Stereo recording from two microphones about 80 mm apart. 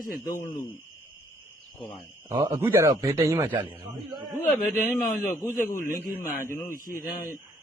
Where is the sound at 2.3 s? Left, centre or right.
Right.